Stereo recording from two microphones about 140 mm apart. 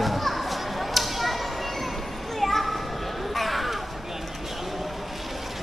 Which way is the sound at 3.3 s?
Centre (ahead or behind).